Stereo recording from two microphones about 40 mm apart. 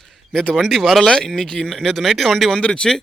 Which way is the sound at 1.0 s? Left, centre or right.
Centre.